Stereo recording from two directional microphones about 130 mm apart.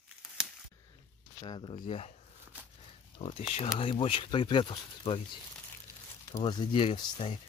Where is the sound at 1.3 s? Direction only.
35° left (ahead or behind).